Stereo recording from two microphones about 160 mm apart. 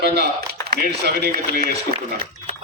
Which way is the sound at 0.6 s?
75° right (ahead or behind).